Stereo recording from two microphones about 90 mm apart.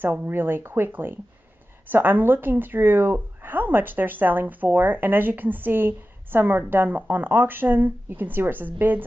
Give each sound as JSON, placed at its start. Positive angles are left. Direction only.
{"t": 0.0, "sound": "a woman's voice", "side_deg": -20}